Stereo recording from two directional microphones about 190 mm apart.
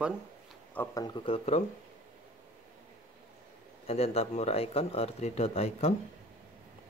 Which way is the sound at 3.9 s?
30° left (ahead or behind).